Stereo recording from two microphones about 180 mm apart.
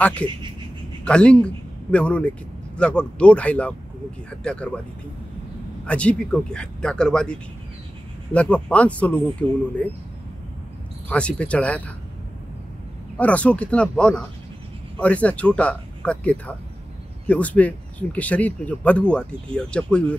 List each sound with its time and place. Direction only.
0.0 s speech: 10° left (ahead or behind)
5.9 s speech: 5° left (ahead or behind)
11.1 s speech: 5° left (ahead or behind)
13.2 s speech: 5° left (ahead or behind)